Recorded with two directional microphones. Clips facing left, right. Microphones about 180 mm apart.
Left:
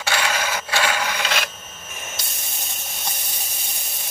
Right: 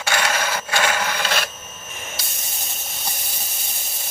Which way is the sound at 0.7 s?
45° right (ahead or behind).